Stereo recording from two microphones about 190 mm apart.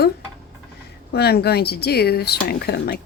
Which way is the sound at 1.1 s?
55° left (ahead or behind).